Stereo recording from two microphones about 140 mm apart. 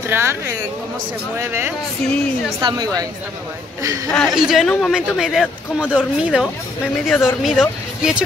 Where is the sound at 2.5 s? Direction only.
30° right (ahead or behind).